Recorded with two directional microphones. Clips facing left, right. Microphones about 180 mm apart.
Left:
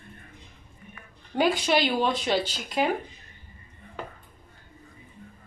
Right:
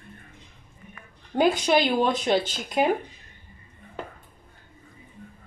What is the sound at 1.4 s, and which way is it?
A woman's voice, 50° right (ahead or behind).